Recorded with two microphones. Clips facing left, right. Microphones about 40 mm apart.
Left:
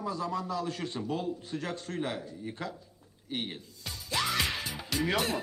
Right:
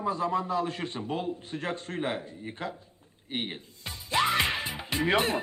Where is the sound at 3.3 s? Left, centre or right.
Right.